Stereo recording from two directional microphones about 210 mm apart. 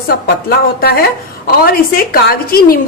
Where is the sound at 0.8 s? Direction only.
50° left (ahead or behind).